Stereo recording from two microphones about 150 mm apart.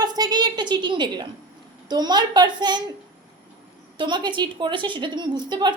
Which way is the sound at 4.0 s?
30° right (ahead or behind).